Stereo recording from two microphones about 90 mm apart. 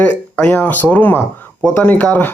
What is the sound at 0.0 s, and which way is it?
Speech, 15° left (ahead or behind).